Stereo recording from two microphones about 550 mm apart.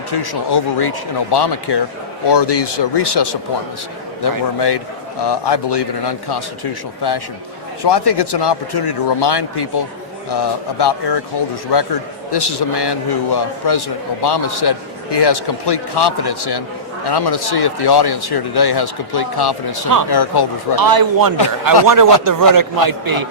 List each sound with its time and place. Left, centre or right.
0.1 s a man's voice: left
7.9 s a man's voice: left
20.7 s a man's voice: right